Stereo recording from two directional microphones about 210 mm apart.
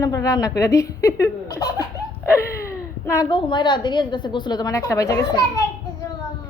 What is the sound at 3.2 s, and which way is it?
A woman's voice, 20° left (ahead or behind).